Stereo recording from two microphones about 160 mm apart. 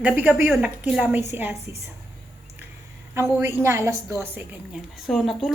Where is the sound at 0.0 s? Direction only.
10° right (ahead or behind).